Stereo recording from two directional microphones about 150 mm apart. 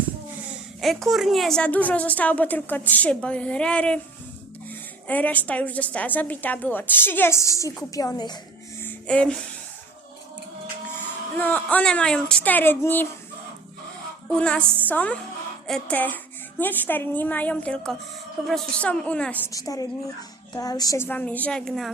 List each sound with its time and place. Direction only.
0.8 s a woman's voice: centre (ahead or behind)
5.0 s a woman's voice: 10° left (ahead or behind); by 8.4 s 25° left (ahead or behind)
8.8 s music: 10° left (ahead or behind)
11.3 s a woman's voice: 10° left (ahead or behind)
14.3 s a woman's voice: 5° left (ahead or behind)
19.5 s a woman's voice: 25° left (ahead or behind); by 21.9 s centre (ahead or behind)